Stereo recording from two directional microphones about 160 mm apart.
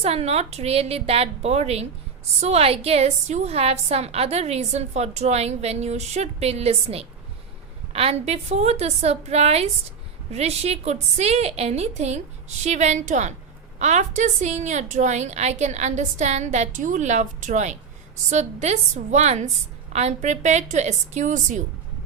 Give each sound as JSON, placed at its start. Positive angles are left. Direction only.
{"t": 0.0, "sound": "a woman's voice", "side_deg": -40}